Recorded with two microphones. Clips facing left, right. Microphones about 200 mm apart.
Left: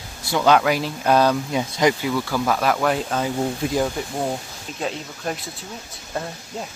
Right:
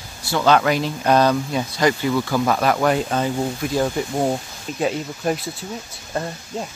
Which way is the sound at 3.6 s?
25° left (ahead or behind).